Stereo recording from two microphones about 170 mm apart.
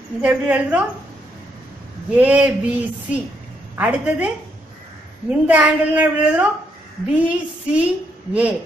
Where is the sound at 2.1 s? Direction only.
10° right (ahead or behind).